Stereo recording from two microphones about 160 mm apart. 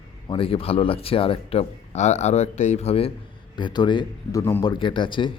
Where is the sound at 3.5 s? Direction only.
30° left (ahead or behind).